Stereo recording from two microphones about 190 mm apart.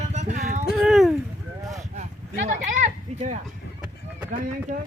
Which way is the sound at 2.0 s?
40° right (ahead or behind).